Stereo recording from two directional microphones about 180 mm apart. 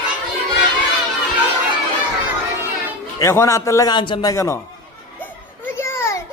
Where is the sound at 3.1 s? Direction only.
15° left (ahead or behind).